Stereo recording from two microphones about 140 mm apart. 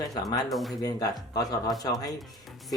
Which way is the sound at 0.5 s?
Centre (ahead or behind).